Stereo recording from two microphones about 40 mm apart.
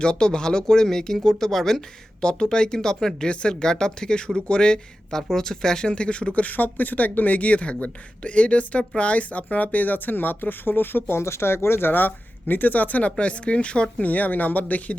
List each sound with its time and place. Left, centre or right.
0.0 s speech: left
2.2 s speech: centre
5.1 s speech: centre
5.9 s speech: left
6.4 s speech: left
11.1 s speech: left
14.0 s speech: left